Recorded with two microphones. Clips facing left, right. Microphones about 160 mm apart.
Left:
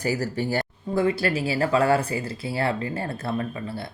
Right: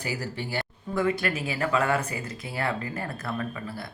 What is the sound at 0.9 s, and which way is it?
Speech, 30° left (ahead or behind).